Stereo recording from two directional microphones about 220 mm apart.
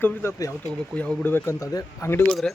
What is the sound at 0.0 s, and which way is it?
Speech, 10° left (ahead or behind).